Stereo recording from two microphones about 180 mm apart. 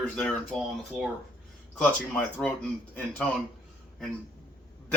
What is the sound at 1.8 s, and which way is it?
Speech, 10° left (ahead or behind).